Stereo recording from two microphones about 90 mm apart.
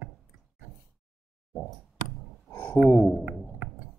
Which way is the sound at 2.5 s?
25° left (ahead or behind).